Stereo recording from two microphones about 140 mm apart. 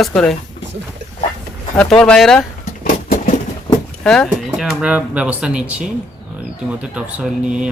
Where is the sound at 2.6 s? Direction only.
75° left (ahead or behind).